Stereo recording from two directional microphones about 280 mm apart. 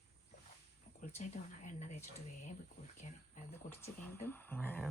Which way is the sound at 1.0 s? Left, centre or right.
Left.